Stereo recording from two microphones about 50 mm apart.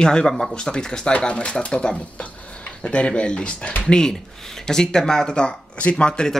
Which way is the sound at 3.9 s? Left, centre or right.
Centre.